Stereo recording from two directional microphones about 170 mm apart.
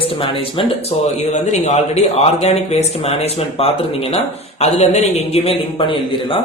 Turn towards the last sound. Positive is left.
turn(degrees=30)  # may be behind; listen again after turning